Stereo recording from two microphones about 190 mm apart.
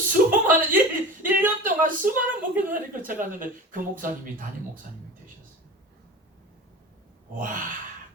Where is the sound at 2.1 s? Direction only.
10° right (ahead or behind).